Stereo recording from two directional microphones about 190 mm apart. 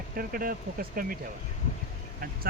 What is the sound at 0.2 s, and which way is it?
Speech, 50° right (ahead or behind).